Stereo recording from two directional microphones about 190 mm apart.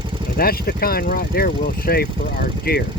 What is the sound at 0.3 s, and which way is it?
Speech, 50° left (ahead or behind).